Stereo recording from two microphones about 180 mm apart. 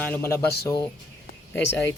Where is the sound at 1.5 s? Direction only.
10° left (ahead or behind).